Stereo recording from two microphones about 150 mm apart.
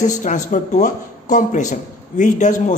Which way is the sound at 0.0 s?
55° left (ahead or behind).